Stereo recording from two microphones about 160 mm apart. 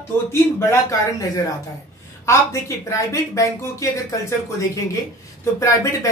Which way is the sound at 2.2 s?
20° left (ahead or behind).